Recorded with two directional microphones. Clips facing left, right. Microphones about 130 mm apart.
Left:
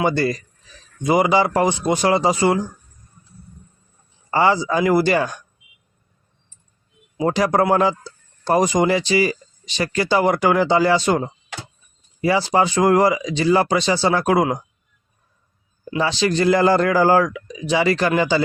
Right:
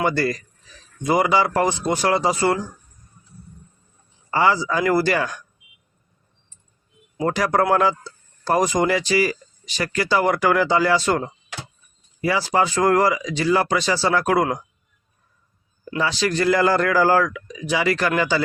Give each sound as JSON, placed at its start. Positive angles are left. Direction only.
{"t": 0.0, "sound": "speech", "side_deg": 20}
{"t": 4.3, "sound": "speech", "side_deg": 25}
{"t": 7.3, "sound": "speech", "side_deg": 20}
{"t": 12.2, "sound": "speech", "side_deg": 25}
{"t": 16.0, "sound": "speech", "side_deg": 25}